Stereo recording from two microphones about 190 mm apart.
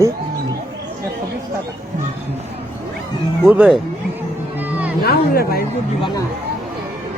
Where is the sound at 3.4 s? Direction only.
5° right (ahead or behind).